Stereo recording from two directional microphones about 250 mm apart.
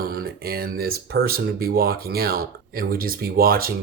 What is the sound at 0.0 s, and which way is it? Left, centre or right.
Speech, right.